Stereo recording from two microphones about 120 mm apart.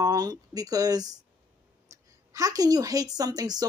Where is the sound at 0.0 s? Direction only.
30° right (ahead or behind).